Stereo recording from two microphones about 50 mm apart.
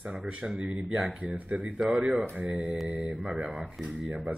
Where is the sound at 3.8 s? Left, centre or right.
Centre.